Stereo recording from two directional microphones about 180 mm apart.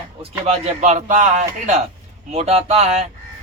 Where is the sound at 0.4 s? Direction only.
40° right (ahead or behind).